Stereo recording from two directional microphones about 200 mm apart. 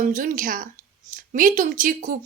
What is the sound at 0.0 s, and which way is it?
A woman's voice, 40° right (ahead or behind).